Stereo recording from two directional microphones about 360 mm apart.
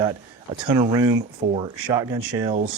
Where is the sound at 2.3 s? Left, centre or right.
Centre.